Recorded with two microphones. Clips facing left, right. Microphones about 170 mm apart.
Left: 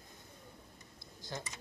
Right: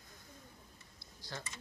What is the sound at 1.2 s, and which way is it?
Speech, 20° left (ahead or behind).